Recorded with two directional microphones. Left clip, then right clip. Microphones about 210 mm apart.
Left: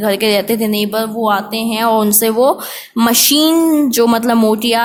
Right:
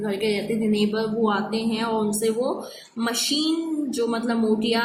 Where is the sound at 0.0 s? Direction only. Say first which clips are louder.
Left 11 dB; 50° left (ahead or behind).